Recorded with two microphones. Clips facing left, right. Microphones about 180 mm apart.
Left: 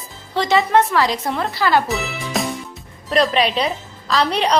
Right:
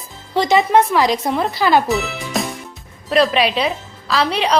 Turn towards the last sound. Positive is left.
turn(degrees=0)  # may be behind; listen again after turning